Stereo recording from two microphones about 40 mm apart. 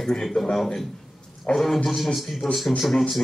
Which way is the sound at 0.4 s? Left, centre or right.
Centre.